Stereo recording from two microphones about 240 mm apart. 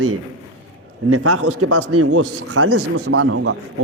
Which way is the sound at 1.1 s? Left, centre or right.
Right.